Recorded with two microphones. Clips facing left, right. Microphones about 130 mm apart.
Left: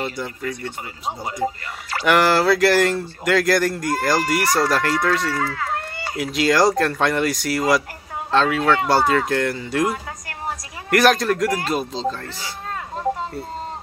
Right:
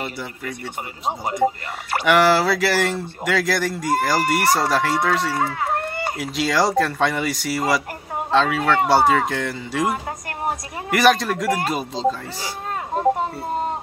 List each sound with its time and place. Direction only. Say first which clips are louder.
0.0 s speech: left 3 dB; 5° right (ahead or behind)
5.3 s speech: right 2 dB; 25° right (ahead or behind)
6.1 s speech: left 4 dB; centre (ahead or behind)
10.9 s speech: left 1 dB; centre (ahead or behind)